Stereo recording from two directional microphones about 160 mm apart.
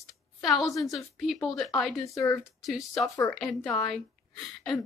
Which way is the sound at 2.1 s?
20° left (ahead or behind).